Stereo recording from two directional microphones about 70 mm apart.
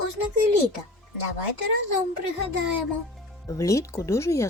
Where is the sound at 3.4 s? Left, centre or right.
Left.